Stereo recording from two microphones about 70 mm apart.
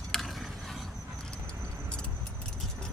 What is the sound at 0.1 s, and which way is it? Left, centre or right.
Mechanisms, centre.